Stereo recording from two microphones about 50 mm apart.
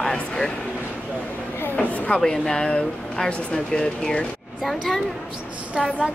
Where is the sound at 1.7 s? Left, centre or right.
Left.